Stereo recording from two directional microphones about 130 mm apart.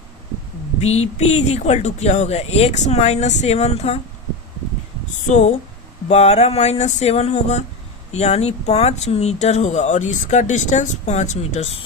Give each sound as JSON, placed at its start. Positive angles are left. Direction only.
{"t": 0.8, "sound": "speech", "side_deg": 55}
{"t": 5.2, "sound": "speech", "side_deg": 60}